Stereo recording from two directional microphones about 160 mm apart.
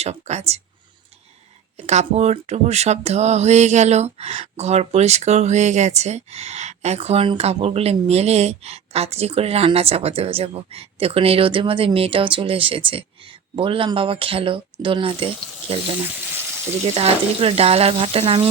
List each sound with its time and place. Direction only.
0.0 s speech: 45° right (ahead or behind)
1.7 s speech: 45° right (ahead or behind)